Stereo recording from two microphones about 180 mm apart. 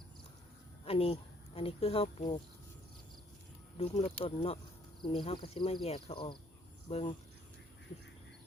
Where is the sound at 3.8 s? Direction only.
30° left (ahead or behind).